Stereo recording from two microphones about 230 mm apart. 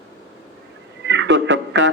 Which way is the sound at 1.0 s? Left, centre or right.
Right.